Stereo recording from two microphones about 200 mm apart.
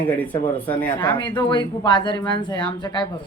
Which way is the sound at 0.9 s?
20° left (ahead or behind).